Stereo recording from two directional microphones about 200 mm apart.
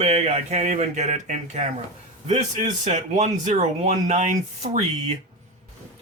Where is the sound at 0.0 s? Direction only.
35° right (ahead or behind).